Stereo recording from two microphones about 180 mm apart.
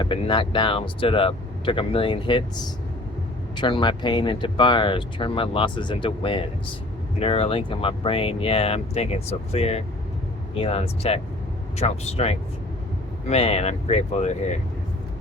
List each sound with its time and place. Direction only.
0.0 s speech: 25° left (ahead or behind)
3.6 s speech: 25° left (ahead or behind)